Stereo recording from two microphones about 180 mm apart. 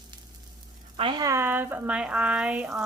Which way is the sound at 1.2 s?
15° right (ahead or behind).